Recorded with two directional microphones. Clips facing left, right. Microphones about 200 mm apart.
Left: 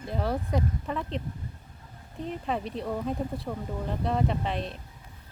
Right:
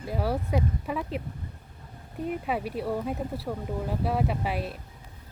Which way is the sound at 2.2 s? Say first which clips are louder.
Right 2 dB; 10° right (ahead or behind).